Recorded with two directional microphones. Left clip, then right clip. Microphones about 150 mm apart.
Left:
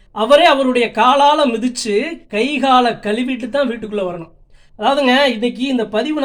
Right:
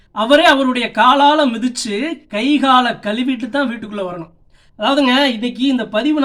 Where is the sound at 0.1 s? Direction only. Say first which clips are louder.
Left 1 dB; 20° left (ahead or behind).